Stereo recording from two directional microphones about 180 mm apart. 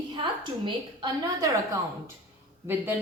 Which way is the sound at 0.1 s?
25° right (ahead or behind).